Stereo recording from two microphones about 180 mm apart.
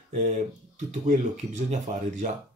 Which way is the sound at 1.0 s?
40° right (ahead or behind).